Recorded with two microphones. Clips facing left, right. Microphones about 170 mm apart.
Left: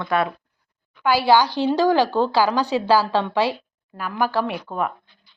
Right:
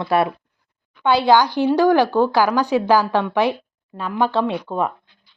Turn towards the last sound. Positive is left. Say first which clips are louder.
# right 4 dB
turn(degrees=-30)  # may be behind; listen again after turning